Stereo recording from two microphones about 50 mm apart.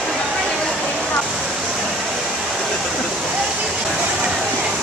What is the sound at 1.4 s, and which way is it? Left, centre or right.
Waterfall, centre.